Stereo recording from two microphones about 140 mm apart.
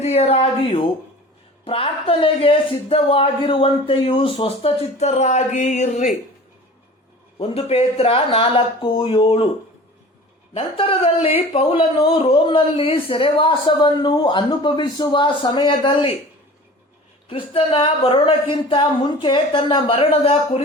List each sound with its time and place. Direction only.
0.0 s speech: 50° left (ahead or behind)
7.3 s speech: 45° left (ahead or behind)
10.5 s speech: 40° left (ahead or behind)
17.2 s speech: 40° left (ahead or behind)